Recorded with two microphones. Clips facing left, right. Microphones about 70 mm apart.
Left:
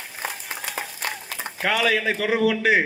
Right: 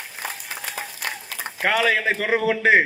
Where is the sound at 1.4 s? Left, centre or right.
Right.